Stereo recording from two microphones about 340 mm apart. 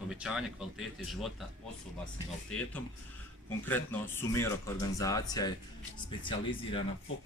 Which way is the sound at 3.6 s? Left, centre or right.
Centre.